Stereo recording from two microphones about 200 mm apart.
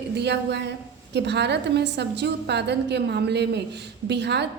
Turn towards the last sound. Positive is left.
turn(degrees=-60)  # may be behind; listen again after turning